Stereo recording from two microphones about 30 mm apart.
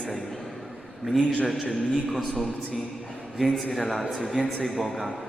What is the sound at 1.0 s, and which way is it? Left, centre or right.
Speech, right.